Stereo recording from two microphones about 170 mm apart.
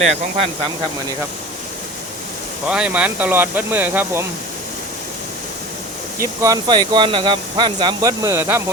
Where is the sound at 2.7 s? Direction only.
5° right (ahead or behind).